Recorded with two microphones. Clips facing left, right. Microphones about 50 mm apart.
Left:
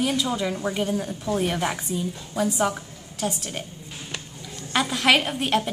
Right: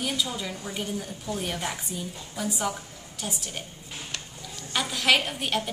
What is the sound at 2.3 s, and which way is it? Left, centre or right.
Speech, left.